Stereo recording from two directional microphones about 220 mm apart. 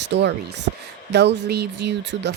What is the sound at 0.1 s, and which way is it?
Speech, 50° right (ahead or behind).